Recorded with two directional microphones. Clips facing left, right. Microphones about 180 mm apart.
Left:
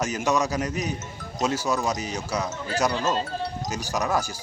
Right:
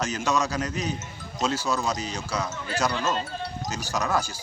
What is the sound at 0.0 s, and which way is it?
Speech, 15° left (ahead or behind).